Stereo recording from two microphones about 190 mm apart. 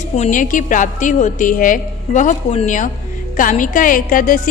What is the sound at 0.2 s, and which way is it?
A woman's voice, 45° left (ahead or behind).